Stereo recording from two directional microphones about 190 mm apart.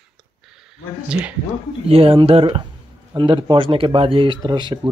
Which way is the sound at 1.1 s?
5° right (ahead or behind).